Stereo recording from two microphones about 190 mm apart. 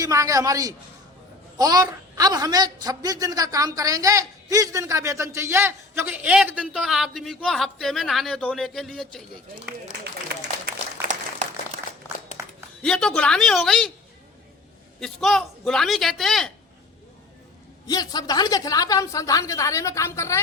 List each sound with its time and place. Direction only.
0.0 s a woman's voice: 15° right (ahead or behind); by 9.2 s centre (ahead or behind)
12.4 s a sound: 15° right (ahead or behind)
12.8 s a man's voice: 5° left (ahead or behind)
15.0 s a man's voice: centre (ahead or behind)
17.8 s a woman's voice: 20° left (ahead or behind)